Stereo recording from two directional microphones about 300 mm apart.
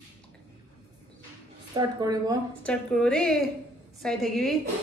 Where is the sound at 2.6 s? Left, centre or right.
Centre.